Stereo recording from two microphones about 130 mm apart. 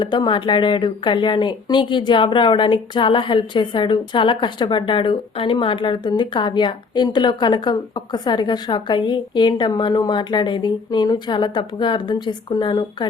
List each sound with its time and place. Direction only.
0.0 s speech: 35° left (ahead or behind)